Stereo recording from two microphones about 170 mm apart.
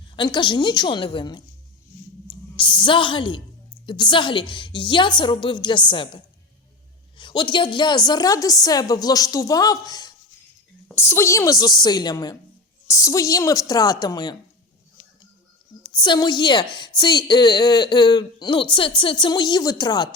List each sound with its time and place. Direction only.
0.2 s a woman's voice: 25° left (ahead or behind)
2.6 s a woman's voice: 30° left (ahead or behind)
16.0 s a woman's voice: 25° left (ahead or behind)